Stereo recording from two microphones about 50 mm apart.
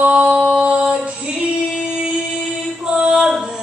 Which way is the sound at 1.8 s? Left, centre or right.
Centre.